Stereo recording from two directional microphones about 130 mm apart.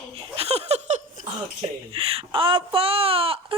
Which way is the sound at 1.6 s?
45° right (ahead or behind).